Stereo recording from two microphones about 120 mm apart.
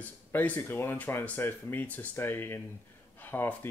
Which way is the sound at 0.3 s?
15° left (ahead or behind).